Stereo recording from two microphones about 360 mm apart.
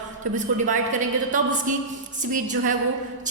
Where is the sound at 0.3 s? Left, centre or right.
Right.